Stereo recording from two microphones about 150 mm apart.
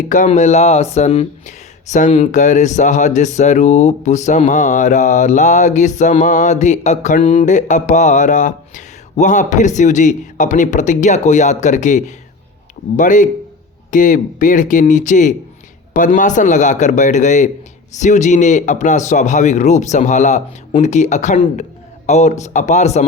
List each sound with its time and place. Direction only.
0.1 s speech: 55° left (ahead or behind)
3.2 s mantra: 50° left (ahead or behind)
18.0 s speech: 55° left (ahead or behind)